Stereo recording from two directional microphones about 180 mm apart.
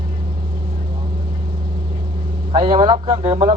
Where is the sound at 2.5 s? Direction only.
30° right (ahead or behind).